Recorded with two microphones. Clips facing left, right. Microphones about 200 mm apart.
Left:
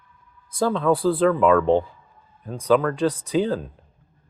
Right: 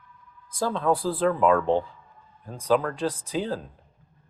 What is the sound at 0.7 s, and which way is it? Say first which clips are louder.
Speech: left 4 dB; 85° left.